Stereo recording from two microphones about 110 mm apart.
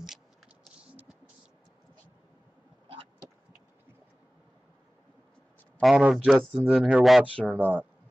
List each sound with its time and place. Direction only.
5.8 s a man's voice: centre (ahead or behind)
7.4 s speech: 15° right (ahead or behind)